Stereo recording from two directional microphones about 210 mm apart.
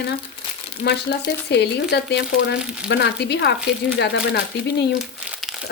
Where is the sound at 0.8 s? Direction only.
50° left (ahead or behind).